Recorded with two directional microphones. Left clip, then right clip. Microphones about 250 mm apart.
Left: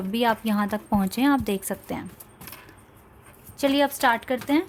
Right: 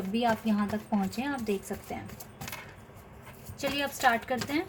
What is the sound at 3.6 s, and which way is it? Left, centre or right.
A woman's voice, left.